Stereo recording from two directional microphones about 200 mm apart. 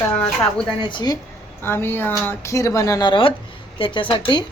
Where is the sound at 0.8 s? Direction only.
25° left (ahead or behind).